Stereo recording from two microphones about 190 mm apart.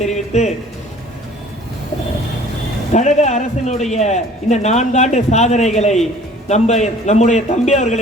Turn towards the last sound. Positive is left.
turn(degrees=35)  # may be behind; listen again after turning